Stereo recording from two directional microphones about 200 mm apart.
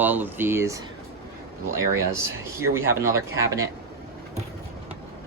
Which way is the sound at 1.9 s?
15° right (ahead or behind).